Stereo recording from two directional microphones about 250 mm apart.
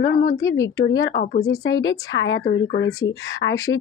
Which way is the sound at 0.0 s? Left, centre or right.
Left.